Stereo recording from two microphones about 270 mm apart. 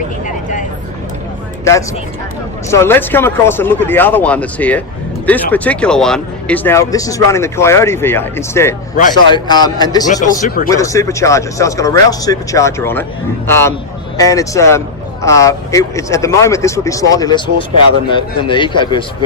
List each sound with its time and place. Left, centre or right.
2.6 s speech: centre
10.4 s speech: left
10.7 s speech: centre